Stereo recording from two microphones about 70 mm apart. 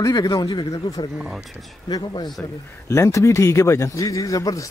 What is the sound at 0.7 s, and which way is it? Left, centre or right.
Speech, left.